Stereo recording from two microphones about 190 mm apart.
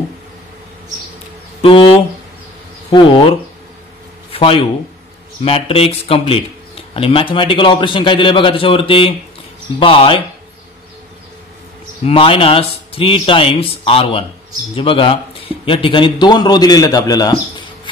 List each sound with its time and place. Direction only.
1.6 s speech: 30° left (ahead or behind)
12.0 s speech: 30° left (ahead or behind)